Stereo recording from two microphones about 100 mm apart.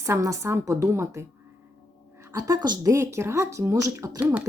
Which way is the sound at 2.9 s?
30° right (ahead or behind).